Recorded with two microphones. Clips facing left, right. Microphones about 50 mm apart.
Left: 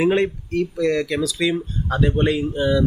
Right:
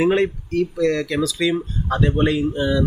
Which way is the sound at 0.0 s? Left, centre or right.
Centre.